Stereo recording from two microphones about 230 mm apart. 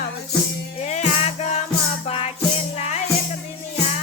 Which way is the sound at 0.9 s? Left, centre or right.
Left.